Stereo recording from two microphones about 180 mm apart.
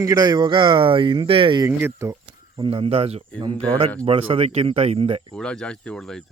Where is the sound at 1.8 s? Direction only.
15° right (ahead or behind).